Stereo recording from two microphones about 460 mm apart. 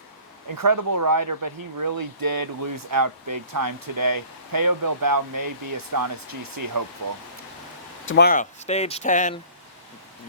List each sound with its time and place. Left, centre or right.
0.6 s speech: right
8.0 s speech: left